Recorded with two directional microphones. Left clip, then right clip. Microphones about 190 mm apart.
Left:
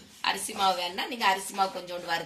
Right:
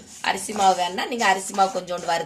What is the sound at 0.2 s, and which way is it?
A woman's voice, 50° right (ahead or behind).